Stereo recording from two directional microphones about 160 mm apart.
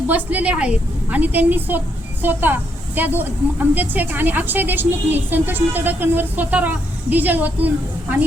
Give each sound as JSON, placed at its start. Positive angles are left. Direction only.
{"t": 0.1, "sound": "a woman's voice", "side_deg": -10}